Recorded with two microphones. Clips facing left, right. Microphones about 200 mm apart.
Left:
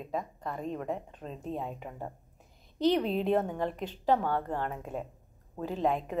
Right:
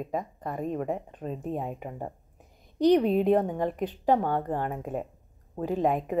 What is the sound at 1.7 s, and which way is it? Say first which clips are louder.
Speech: right 4 dB; 10° right (ahead or behind).